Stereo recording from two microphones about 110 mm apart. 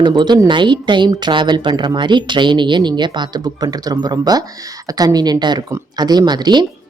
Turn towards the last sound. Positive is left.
turn(degrees=-40)  # may be behind; listen again after turning